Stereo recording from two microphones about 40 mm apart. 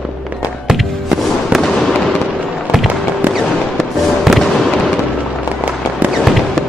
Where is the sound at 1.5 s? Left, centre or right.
Centre.